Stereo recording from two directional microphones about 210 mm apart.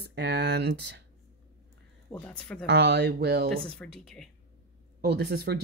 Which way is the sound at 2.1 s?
5° left (ahead or behind).